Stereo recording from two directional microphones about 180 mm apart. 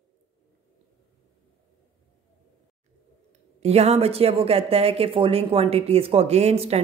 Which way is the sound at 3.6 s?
35° right (ahead or behind).